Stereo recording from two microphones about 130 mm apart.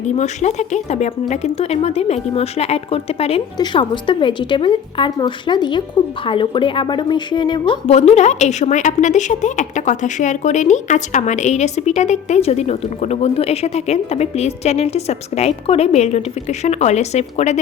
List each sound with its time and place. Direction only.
0.0 s a woman's voice: 65° left (ahead or behind)
3.6 s a woman's voice: 35° left (ahead or behind)
7.9 s a woman's voice: 55° left (ahead or behind)